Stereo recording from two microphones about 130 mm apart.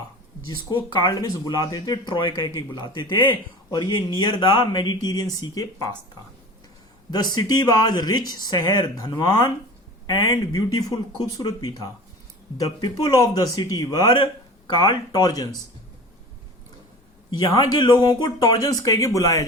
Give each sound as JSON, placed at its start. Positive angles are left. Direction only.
{"t": 0.4, "sound": "speech", "side_deg": 35}
{"t": 7.1, "sound": "speech", "side_deg": 30}
{"t": 17.3, "sound": "speech", "side_deg": 30}